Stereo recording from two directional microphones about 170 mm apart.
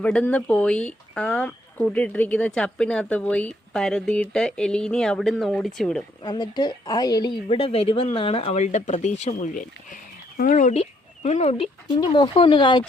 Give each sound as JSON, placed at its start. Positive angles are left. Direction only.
{"t": 0.0, "sound": "speech", "side_deg": 5}
{"t": 6.2, "sound": "a woman's voice", "side_deg": 25}
{"t": 7.4, "sound": "speech", "side_deg": 35}
{"t": 9.9, "sound": "a woman's voice", "side_deg": 55}